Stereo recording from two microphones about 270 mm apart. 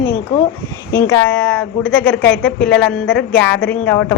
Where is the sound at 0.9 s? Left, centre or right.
Centre.